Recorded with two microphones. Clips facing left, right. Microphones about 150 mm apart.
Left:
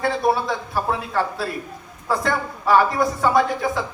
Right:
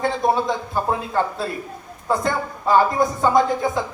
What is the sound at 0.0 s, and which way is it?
A woman's voice, 20° right (ahead or behind).